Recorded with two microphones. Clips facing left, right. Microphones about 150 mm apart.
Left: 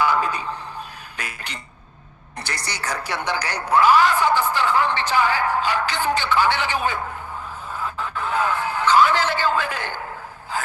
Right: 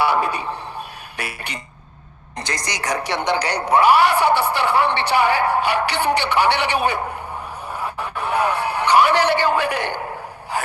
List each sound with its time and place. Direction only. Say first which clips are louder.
0.2 s a man's voice: right 2 dB; 15° right (ahead or behind)
2.6 s speech: right 5 dB; 15° right (ahead or behind)
7.7 s a sound: right 1 dB; 15° right (ahead or behind)